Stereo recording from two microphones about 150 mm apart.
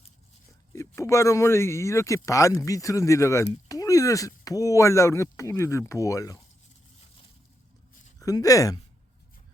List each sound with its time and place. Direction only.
0.7 s speech: 20° left (ahead or behind)
8.2 s speech: 25° left (ahead or behind)